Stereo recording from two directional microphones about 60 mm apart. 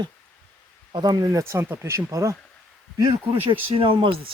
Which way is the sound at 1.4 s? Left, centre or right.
Right.